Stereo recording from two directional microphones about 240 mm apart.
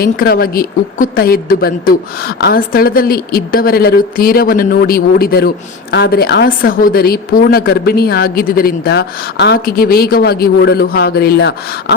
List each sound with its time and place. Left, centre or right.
0.0 s a woman's voice: left